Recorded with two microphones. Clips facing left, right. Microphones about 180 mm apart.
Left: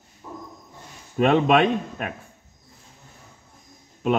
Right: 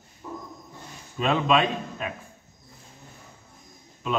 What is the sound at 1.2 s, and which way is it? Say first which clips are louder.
Speech: left 5 dB; 60° left (ahead or behind).